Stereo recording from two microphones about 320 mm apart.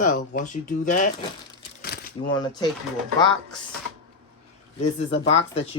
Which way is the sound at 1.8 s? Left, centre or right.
Left.